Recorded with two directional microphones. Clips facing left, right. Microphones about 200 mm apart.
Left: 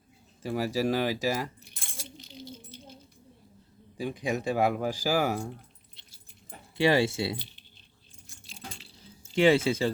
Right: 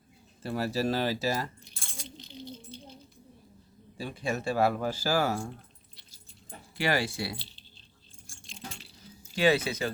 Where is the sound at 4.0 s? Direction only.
15° left (ahead or behind).